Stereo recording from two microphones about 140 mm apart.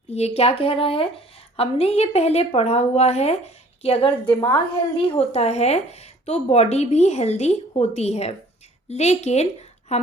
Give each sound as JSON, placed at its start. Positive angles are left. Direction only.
{"t": 0.1, "sound": "a woman's voice", "side_deg": 50}